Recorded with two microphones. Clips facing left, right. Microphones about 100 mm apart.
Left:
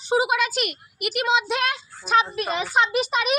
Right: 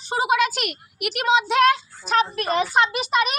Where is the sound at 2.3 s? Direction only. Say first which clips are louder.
Right 4 dB; 50° right (ahead or behind).